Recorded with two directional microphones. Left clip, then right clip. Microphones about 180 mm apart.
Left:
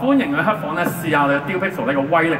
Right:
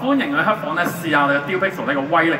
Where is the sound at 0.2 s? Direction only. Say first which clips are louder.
Even; 45° left (ahead or behind).